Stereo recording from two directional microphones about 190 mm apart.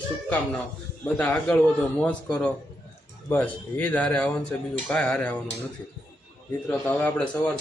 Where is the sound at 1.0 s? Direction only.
10° left (ahead or behind).